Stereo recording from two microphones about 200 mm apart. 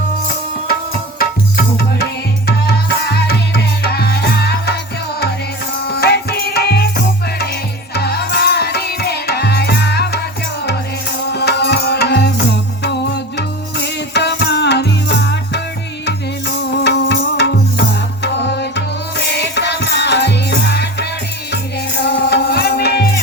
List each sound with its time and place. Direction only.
1.2 s music: 50° left (ahead or behind)
5.9 s music: 50° left (ahead or behind)
11.3 s music: 55° left (ahead or behind)